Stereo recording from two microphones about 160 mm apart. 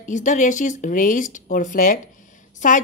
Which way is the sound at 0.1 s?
50° left (ahead or behind).